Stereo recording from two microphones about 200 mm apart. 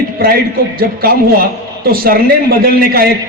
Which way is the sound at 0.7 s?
50° right (ahead or behind).